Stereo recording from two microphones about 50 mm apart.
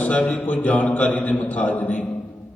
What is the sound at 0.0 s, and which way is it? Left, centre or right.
Mantra, left.